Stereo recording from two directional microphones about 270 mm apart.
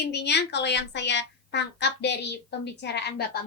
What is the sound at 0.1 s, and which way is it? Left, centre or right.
A woman's voice, left.